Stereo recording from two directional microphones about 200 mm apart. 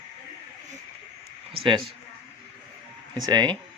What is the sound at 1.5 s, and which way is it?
Speech, 25° right (ahead or behind).